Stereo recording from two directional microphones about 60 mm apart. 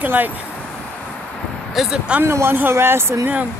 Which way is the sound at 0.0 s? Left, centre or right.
Right.